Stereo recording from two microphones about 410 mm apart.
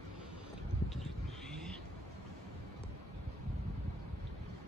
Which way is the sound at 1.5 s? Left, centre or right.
Centre.